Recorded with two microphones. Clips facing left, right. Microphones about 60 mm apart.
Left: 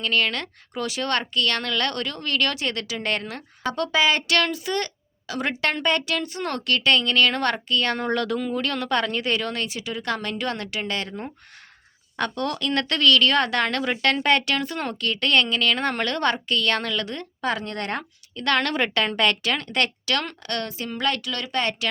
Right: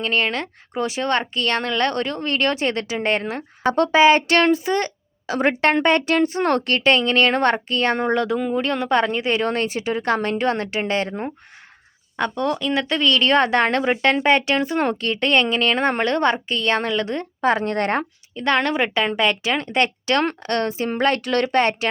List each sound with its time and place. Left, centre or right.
0.0 s speech: right
12.1 s speech: centre; by 18.0 s right
18.3 s speech: centre